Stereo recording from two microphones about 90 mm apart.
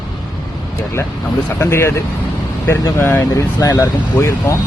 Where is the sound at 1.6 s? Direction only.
30° left (ahead or behind).